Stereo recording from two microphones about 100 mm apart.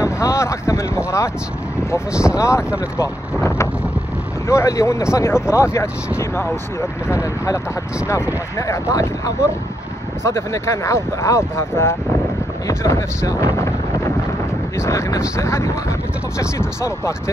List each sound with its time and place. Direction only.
0.0 s vehicle: 30° left (ahead or behind)
2.3 s speech: 30° left (ahead or behind)
4.5 s speech: 30° left (ahead or behind)
14.8 s speech: 30° left (ahead or behind)